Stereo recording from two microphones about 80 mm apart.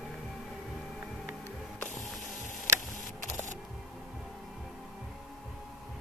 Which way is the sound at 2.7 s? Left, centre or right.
Right.